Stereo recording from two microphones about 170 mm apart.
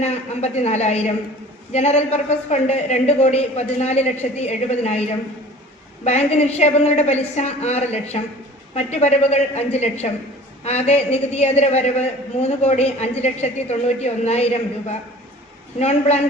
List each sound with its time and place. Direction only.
0.0 s a man's voice: 40° left (ahead or behind)
6.1 s a man's voice: 40° left (ahead or behind)
15.8 s a man's voice: 40° left (ahead or behind)